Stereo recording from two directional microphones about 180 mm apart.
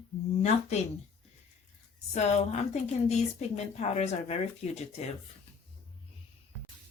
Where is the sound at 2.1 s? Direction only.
40° left (ahead or behind).